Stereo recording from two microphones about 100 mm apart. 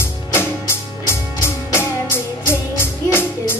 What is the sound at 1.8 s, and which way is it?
Music, 20° left (ahead or behind).